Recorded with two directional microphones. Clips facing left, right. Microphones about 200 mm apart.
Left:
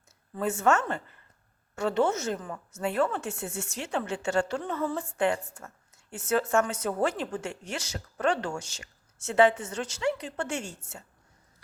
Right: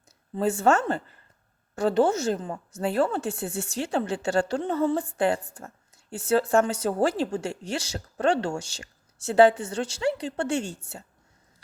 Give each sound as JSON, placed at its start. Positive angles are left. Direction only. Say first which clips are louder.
{"t": 0.3, "sound": "a woman's voice", "louder": "right 3 dB", "side_deg": -30}